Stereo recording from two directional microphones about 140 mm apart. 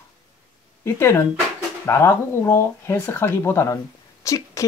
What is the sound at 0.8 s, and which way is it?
Speech, 20° left (ahead or behind).